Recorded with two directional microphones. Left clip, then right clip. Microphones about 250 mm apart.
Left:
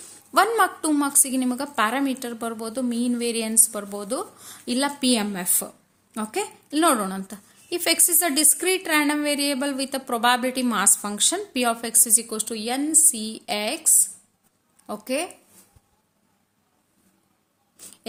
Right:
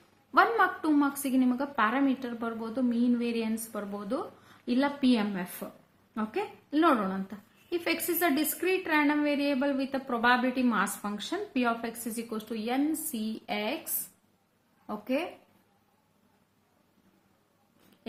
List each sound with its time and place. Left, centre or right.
0.3 s a woman's voice: left
14.8 s speech: left